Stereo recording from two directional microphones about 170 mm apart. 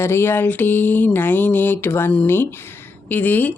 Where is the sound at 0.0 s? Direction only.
15° left (ahead or behind).